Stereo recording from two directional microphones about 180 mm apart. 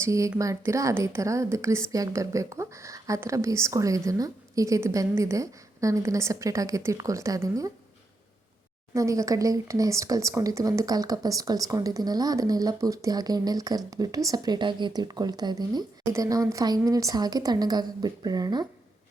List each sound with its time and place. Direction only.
0.0 s a woman's voice: 15° right (ahead or behind)
8.9 s speech: 15° right (ahead or behind)